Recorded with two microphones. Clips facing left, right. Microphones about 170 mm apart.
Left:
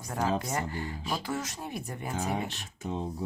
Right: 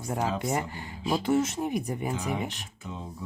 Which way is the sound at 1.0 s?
25° right (ahead or behind).